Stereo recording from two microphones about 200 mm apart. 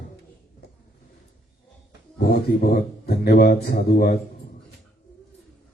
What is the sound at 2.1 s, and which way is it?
Speech, 50° left (ahead or behind).